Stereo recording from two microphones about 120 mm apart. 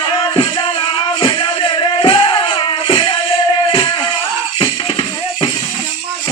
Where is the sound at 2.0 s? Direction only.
50° left (ahead or behind).